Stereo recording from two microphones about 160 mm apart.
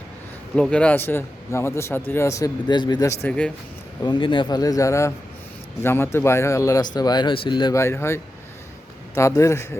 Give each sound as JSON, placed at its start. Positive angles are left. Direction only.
{"t": 0.5, "sound": "a man's voice", "side_deg": 5}
{"t": 3.2, "sound": "a man's voice", "side_deg": 5}
{"t": 4.0, "sound": "a man's voice", "side_deg": 30}